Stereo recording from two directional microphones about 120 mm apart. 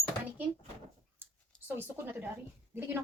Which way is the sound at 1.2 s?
15° right (ahead or behind).